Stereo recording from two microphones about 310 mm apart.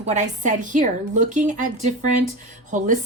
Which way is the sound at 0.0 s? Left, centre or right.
Right.